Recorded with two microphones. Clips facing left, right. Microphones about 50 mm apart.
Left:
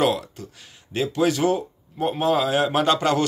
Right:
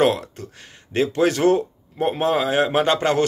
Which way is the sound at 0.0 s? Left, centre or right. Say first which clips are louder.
Right 3 dB; right.